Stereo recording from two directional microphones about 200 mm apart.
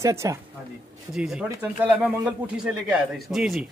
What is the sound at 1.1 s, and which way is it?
Speech, centre (ahead or behind).